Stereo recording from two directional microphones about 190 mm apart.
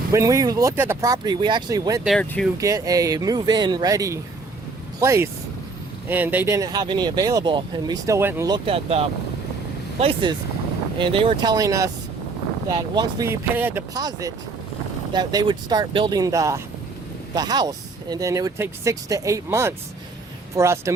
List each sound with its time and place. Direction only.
0.1 s speech: 15° right (ahead or behind)
2.0 s speech: 5° left (ahead or behind)
2.6 s speech: 15° right (ahead or behind)